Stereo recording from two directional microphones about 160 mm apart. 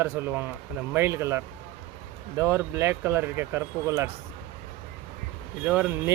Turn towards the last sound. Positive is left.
turn(degrees=-10)  # may be behind; listen again after turning